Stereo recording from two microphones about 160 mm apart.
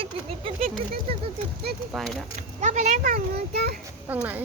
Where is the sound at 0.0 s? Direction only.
35° right (ahead or behind).